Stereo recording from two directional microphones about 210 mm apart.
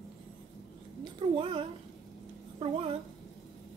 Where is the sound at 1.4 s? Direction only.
25° right (ahead or behind).